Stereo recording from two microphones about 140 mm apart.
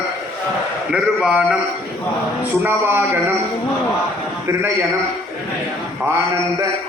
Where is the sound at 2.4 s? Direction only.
15° right (ahead or behind).